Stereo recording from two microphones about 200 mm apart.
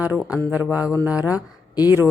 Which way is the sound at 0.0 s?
5° right (ahead or behind).